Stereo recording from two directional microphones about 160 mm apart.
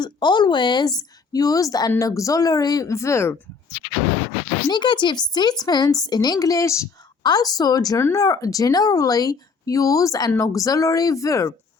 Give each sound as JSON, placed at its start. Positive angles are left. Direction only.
{"t": 0.0, "sound": "a woman's voice", "side_deg": 25}
{"t": 4.7, "sound": "a woman's voice", "side_deg": 30}